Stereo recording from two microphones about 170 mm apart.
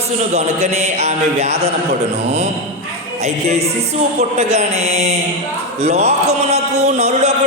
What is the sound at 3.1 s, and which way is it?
A man's voice, 40° right (ahead or behind).